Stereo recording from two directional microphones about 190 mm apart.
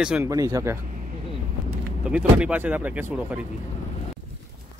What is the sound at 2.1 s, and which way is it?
Speech, 5° right (ahead or behind).